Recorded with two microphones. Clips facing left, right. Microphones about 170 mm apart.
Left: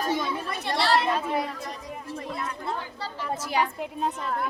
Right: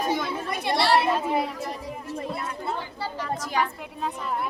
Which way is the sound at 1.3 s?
25° right (ahead or behind).